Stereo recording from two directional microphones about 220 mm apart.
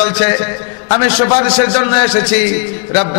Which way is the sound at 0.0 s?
10° left (ahead or behind).